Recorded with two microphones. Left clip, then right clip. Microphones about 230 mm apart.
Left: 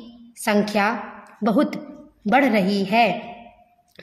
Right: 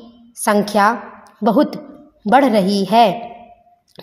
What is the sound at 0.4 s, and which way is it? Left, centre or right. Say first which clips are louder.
A woman's voice: right 6 dB; centre.